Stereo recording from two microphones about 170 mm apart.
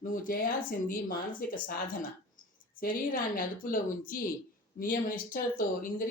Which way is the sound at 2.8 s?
55° left (ahead or behind).